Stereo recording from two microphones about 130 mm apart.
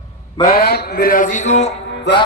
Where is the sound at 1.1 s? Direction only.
85° left; by 1.7 s 60° left (ahead or behind).